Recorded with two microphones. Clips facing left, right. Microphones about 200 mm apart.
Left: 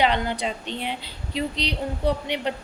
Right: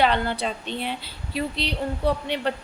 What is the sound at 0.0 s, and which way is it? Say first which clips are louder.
A woman's voice: right 1 dB; 15° left (ahead or behind).